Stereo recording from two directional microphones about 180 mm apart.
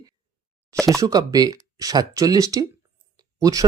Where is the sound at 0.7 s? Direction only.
5° left (ahead or behind).